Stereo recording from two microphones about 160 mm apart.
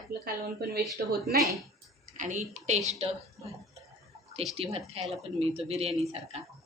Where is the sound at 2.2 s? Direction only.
50° right (ahead or behind).